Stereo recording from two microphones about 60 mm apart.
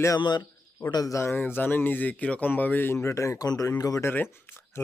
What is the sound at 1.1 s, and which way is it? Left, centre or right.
Speech, left.